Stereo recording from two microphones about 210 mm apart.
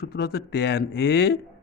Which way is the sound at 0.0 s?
50° left (ahead or behind).